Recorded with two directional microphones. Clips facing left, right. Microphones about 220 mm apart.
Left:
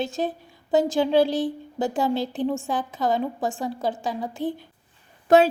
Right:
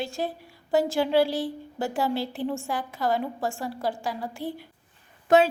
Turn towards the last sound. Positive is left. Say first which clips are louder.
# left 3 dB
turn(degrees=35)  # may be behind; listen again after turning